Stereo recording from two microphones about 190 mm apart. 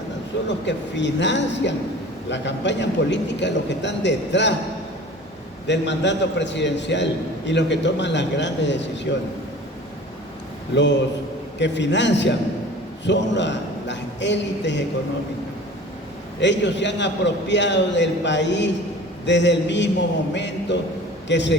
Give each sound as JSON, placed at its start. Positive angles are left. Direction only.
{"t": 0.4, "sound": "a man's voice", "side_deg": 70}
{"t": 5.6, "sound": "a man's voice", "side_deg": 70}
{"t": 11.6, "sound": "a man's voice", "side_deg": 70}
{"t": 16.4, "sound": "a man's voice", "side_deg": 70}